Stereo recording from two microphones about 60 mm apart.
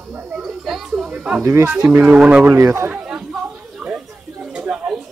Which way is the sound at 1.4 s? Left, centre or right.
Right.